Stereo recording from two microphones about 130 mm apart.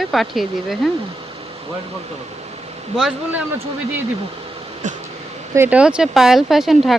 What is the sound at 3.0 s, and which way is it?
Speech, 5° right (ahead or behind).